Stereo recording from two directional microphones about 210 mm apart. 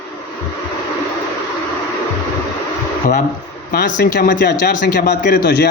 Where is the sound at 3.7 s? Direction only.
40° left (ahead or behind).